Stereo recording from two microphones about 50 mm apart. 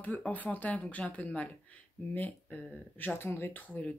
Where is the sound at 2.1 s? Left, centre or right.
Left.